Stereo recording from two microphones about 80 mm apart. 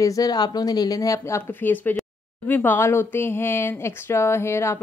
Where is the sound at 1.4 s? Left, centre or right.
Left.